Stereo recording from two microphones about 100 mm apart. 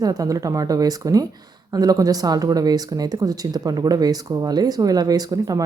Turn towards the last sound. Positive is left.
turn(degrees=-40)  # may be behind; listen again after turning